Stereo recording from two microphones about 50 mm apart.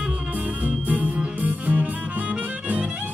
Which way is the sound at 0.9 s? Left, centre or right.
Right.